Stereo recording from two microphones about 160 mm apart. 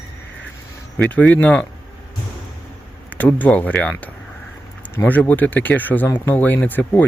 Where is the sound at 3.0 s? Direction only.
10° left (ahead or behind).